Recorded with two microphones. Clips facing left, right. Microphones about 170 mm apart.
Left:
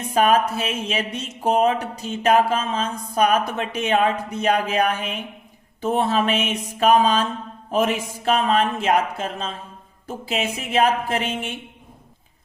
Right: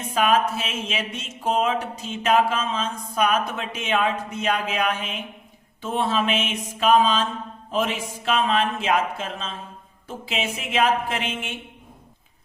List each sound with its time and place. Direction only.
0.1 s speech: 40° left (ahead or behind)